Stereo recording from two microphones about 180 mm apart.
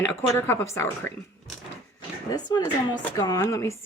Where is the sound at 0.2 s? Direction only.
15° left (ahead or behind).